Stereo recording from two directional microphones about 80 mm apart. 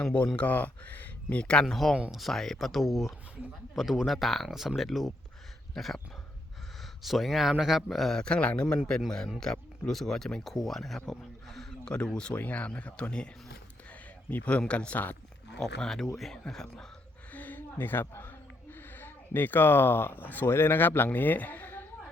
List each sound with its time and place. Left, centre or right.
0.0 s speech: centre
1.6 s speech: centre
5.7 s dog: centre
7.0 s speech: centre
13.9 s a sound: left
14.6 s speech: centre
15.5 s speech: centre
17.3 s a sound: left
18.0 s speech: left